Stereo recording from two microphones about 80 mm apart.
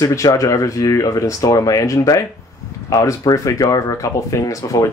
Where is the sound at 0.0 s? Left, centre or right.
Left.